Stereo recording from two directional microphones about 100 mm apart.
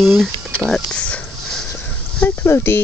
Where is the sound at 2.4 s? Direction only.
25° left (ahead or behind).